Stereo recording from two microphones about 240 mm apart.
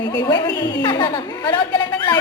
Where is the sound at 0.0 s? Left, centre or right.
Centre.